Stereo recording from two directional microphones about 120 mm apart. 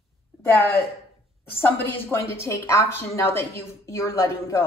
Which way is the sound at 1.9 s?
20° left (ahead or behind).